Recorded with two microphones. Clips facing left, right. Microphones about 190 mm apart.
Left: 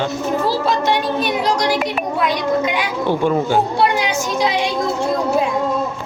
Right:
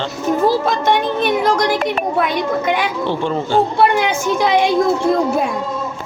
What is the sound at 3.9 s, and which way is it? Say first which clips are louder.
Speech: right 3 dB; 55° right (ahead or behind).